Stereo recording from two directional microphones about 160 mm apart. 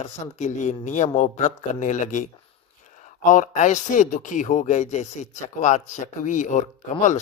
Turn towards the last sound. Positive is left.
turn(degrees=50)  # may be behind; listen again after turning